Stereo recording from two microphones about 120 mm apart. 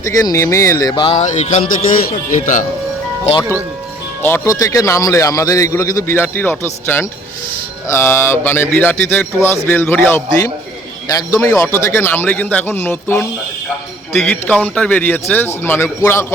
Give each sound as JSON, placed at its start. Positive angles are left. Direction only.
{"t": 0.0, "sound": "speech", "side_deg": 30}
{"t": 1.1, "sound": "music", "side_deg": 75}
{"t": 2.3, "sound": "speech", "side_deg": 90}
{"t": 4.2, "sound": "a man's voice", "side_deg": 20}